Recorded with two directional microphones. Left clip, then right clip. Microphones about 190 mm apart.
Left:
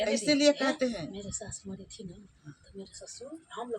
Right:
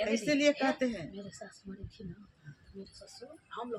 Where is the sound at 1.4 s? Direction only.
30° left (ahead or behind).